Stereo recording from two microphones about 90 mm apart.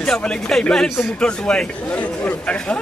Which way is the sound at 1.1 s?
10° left (ahead or behind).